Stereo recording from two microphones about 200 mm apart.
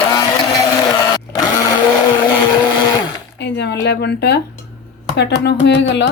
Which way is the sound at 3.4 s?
60° left (ahead or behind).